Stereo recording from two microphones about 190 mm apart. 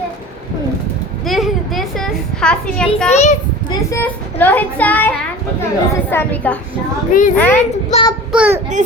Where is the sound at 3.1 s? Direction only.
40° left (ahead or behind).